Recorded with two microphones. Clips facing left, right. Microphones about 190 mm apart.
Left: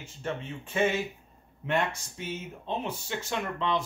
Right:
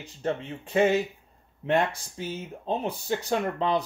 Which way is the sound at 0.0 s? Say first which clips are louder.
Right 5 dB; 35° right (ahead or behind).